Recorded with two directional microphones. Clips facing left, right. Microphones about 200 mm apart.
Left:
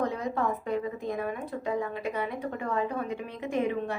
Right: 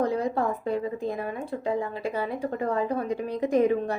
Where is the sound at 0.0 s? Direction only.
35° right (ahead or behind).